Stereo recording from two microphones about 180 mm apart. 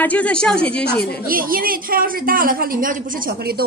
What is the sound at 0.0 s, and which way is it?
Speech, 10° left (ahead or behind).